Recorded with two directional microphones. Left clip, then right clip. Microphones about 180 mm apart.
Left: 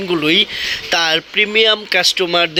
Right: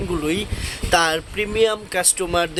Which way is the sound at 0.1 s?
20° left (ahead or behind).